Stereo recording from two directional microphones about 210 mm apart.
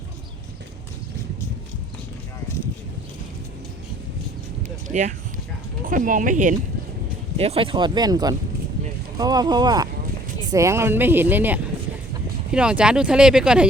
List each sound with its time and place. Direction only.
4.9 s speech: 35° right (ahead or behind)
7.3 s speech: 30° right (ahead or behind); by 13.7 s 5° right (ahead or behind)